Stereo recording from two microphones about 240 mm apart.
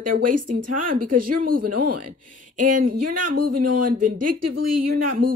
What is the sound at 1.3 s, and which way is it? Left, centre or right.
Speech, right.